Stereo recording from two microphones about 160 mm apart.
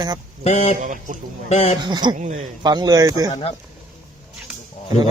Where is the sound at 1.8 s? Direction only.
25° right (ahead or behind).